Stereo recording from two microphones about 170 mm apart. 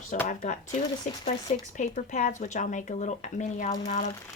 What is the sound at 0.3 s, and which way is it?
Speech, 50° left (ahead or behind).